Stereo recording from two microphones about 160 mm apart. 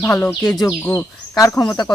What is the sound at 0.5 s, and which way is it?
Speech, 20° left (ahead or behind).